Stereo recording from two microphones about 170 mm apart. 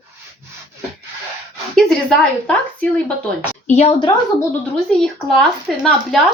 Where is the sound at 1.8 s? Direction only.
5° left (ahead or behind).